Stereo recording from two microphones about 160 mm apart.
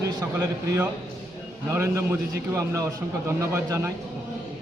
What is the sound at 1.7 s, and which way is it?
Speech, 15° right (ahead or behind).